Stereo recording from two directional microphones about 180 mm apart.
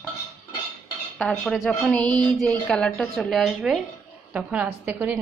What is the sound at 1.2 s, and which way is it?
A woman's voice, 5° left (ahead or behind).